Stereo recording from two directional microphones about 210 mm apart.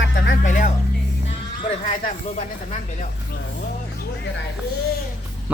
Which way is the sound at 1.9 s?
35° left (ahead or behind).